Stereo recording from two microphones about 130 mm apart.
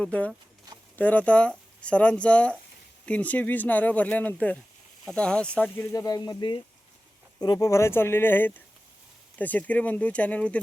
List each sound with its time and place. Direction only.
0.0 s speech: 10° left (ahead or behind)